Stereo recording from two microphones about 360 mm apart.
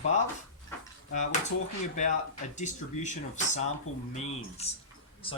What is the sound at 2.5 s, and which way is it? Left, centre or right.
Speech, centre.